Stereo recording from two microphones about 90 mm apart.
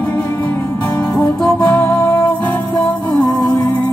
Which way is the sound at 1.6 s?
20° left (ahead or behind).